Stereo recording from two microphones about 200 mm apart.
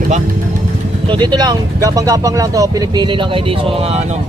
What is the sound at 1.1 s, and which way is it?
Speech, 20° right (ahead or behind).